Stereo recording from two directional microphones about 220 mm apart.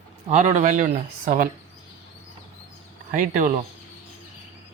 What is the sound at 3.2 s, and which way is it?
Speech, 35° right (ahead or behind).